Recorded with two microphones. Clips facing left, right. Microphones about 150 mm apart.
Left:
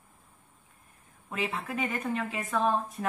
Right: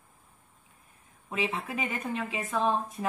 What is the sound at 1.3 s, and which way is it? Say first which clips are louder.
A woman's voice: right 1 dB; centre (ahead or behind).